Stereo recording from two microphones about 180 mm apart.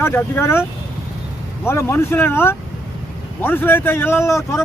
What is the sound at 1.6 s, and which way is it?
A man's voice, 15° left (ahead or behind).